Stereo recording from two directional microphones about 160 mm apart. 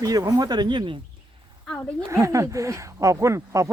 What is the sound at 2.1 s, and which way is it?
Speech, 20° right (ahead or behind).